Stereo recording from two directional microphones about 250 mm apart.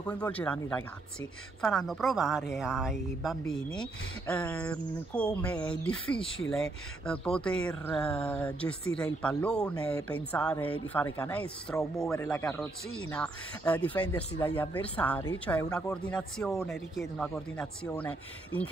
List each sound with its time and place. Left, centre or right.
0.0 s speech: centre